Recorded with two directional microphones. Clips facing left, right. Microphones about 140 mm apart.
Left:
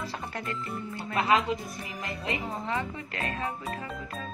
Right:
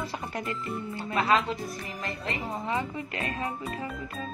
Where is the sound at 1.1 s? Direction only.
20° left (ahead or behind).